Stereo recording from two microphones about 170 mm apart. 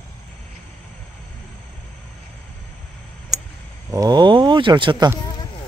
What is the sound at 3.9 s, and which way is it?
Speech, 25° right (ahead or behind).